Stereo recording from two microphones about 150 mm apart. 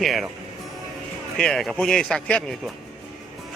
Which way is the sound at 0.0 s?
Centre (ahead or behind).